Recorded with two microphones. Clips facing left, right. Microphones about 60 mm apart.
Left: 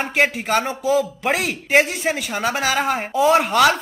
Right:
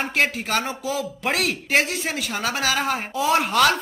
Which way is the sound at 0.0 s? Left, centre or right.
Centre.